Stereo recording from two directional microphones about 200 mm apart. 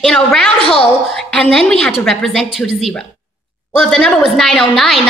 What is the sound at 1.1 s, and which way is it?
A woman's voice, 5° left (ahead or behind).